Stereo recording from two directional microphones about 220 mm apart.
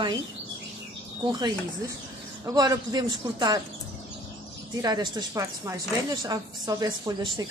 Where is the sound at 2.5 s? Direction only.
15° right (ahead or behind).